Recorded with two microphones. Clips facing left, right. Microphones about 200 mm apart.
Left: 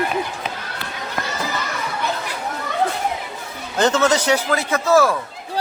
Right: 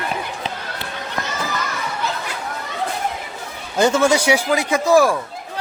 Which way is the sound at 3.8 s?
10° right (ahead or behind).